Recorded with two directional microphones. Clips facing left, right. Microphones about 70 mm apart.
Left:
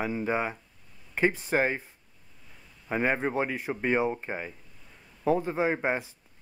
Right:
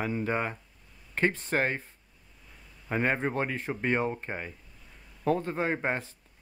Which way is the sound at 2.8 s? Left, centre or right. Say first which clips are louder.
Left 1 dB; centre.